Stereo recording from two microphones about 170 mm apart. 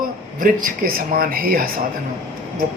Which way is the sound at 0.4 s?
55° right (ahead or behind).